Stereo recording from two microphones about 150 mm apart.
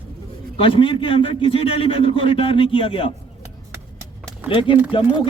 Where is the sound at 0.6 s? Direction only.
35° left (ahead or behind).